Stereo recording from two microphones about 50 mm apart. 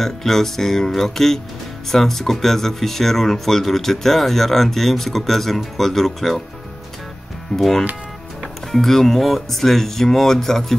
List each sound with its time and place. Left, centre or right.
0.0 s speech: centre
7.5 s speech: centre